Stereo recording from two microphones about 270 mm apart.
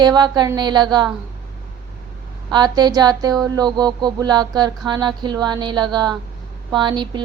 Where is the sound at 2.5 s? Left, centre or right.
Centre.